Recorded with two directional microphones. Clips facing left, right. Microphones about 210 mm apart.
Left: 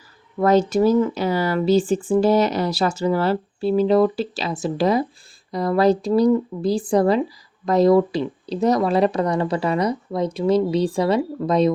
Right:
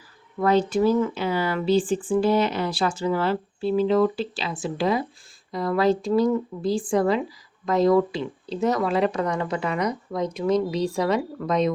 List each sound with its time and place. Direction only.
0.3 s speech: 40° left (ahead or behind)